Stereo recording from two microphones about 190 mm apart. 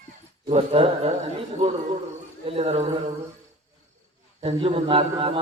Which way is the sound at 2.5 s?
30° right (ahead or behind).